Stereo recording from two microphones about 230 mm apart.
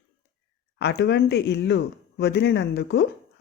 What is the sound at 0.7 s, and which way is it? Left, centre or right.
Speech, left.